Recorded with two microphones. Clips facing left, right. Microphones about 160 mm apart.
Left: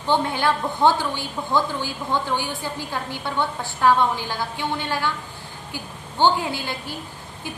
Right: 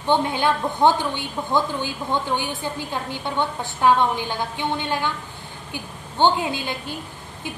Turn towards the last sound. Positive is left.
turn(degrees=-20)  # may be behind; listen again after turning